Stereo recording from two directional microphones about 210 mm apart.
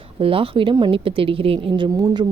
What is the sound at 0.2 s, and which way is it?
Speech, 25° right (ahead or behind).